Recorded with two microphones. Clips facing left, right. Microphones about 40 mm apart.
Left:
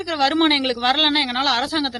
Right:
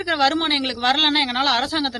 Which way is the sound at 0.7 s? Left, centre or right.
Centre.